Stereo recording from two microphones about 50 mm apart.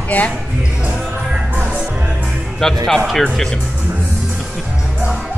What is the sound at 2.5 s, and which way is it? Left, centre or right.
Speech, centre.